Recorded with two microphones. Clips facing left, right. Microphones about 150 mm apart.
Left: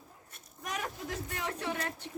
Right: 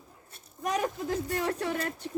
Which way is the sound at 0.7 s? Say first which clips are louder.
Right 9 dB; 35° right (ahead or behind).